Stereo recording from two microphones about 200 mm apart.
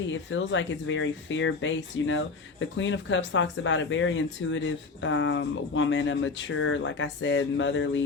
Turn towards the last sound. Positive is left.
turn(degrees=70)  # may be behind; listen again after turning